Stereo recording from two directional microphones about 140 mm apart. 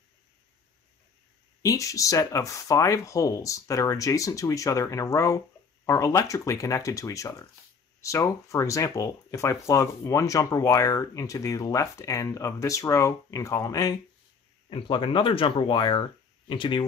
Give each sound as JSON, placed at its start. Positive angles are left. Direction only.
{"t": 1.6, "sound": "speech", "side_deg": 25}
{"t": 14.7, "sound": "speech", "side_deg": 40}